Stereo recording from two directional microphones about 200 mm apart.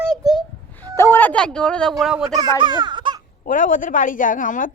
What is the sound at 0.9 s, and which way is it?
Speech, 15° left (ahead or behind).